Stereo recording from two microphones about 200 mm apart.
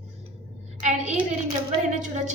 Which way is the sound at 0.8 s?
35° right (ahead or behind).